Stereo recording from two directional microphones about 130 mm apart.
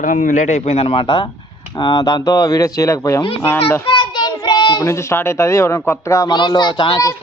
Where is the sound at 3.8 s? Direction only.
40° left (ahead or behind); by 6.3 s 25° left (ahead or behind).